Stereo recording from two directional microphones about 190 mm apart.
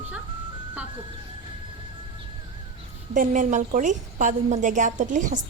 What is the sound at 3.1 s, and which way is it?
A woman's voice, 40° right (ahead or behind).